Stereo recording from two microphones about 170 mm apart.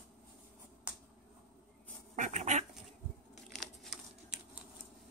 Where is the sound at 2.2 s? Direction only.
45° right (ahead or behind).